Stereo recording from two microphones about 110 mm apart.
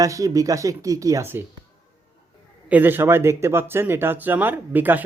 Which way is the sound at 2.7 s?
15° right (ahead or behind).